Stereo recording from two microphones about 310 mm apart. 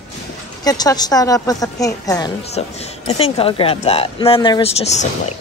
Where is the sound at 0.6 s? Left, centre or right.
Centre.